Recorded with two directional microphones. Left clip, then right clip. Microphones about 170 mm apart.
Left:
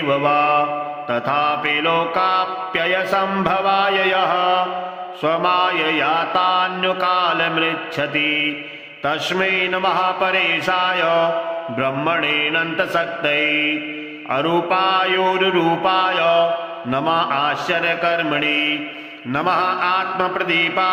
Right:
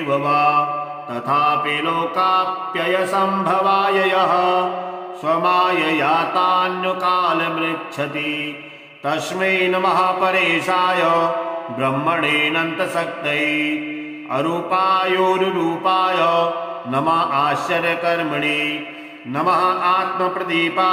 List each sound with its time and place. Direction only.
0.1 s music: 25° left (ahead or behind)
19.3 s mantra: 15° left (ahead or behind)